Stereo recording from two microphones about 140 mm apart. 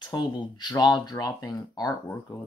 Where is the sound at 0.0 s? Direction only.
30° left (ahead or behind).